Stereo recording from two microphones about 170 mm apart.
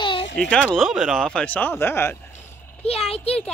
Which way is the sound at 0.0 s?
30° left (ahead or behind).